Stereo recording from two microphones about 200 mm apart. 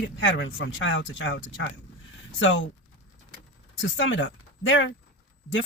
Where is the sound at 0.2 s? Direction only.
70° left (ahead or behind).